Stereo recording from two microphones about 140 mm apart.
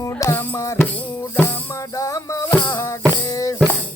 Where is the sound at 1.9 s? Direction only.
20° left (ahead or behind).